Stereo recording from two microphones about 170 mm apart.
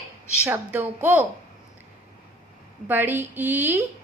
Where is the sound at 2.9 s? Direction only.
10° right (ahead or behind).